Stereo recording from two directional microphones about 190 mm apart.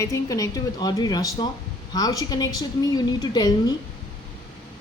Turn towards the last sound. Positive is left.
turn(degrees=20)  # may be behind; listen again after turning